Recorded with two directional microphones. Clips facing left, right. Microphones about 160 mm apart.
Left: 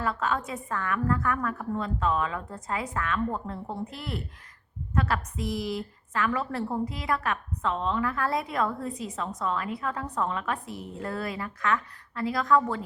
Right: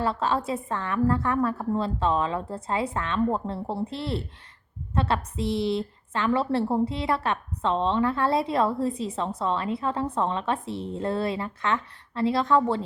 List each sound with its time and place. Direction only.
0.0 s a woman's voice: 30° right (ahead or behind)